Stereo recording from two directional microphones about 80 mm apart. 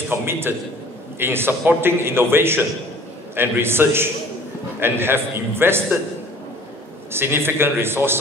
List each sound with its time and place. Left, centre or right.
0.1 s a man's voice: right
7.1 s a man's voice: right